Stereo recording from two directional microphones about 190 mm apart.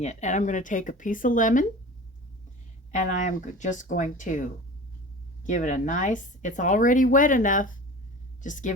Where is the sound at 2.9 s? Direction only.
40° left (ahead or behind).